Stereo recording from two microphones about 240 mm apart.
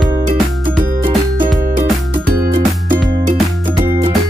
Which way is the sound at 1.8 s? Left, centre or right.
Right.